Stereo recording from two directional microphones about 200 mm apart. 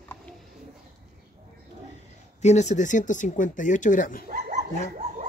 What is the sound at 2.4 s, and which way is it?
Speech, 35° left (ahead or behind).